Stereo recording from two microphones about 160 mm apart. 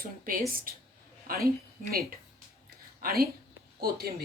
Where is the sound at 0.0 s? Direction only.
65° right (ahead or behind).